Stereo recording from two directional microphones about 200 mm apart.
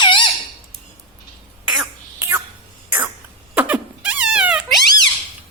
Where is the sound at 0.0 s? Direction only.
25° left (ahead or behind).